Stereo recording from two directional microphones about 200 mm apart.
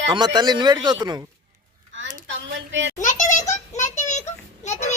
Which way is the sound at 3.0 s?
40° left (ahead or behind).